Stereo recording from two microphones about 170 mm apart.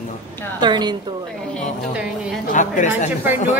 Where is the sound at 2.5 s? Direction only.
45° left (ahead or behind).